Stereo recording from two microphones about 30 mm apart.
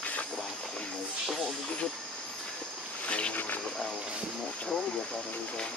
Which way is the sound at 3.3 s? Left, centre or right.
Left.